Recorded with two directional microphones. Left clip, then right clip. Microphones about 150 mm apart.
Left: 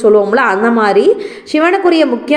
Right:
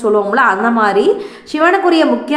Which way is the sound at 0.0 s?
15° left (ahead or behind).